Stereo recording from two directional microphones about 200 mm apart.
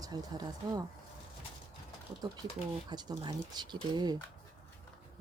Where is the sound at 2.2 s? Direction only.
20° right (ahead or behind).